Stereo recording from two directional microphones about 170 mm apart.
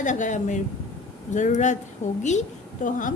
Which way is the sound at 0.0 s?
45° left (ahead or behind).